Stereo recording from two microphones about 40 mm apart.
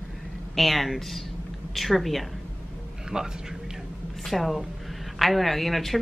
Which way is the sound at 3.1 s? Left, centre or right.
Right.